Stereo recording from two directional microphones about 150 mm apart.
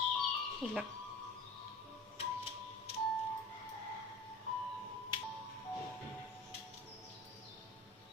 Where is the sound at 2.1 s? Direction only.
40° left (ahead or behind).